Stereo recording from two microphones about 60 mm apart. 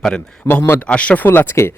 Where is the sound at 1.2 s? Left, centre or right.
Left.